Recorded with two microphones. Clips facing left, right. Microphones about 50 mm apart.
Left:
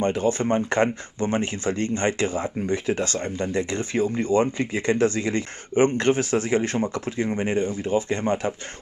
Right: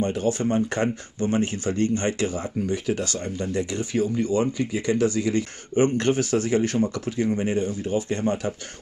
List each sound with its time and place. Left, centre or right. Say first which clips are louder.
0.0 s speech: left 1 dB; left